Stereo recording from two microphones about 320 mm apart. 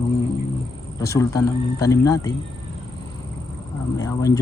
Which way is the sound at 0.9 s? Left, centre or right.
Centre.